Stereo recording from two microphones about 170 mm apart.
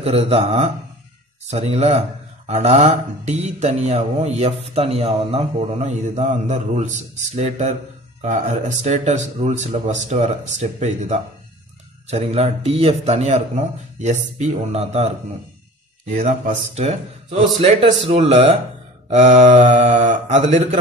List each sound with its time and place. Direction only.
0.0 s speech: 35° right (ahead or behind)